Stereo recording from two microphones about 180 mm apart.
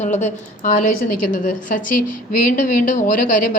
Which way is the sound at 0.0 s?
40° left (ahead or behind).